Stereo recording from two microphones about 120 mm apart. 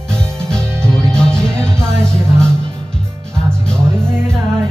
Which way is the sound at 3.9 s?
20° right (ahead or behind).